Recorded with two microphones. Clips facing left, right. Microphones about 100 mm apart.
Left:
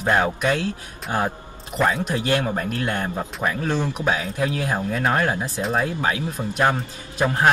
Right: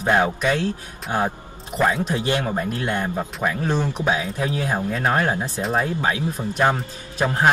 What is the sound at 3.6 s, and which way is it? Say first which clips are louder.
Speech: right 1 dB; 15° right (ahead or behind).